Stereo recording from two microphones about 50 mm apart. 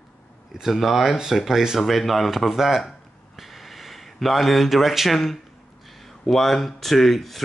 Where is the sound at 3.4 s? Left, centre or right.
Centre.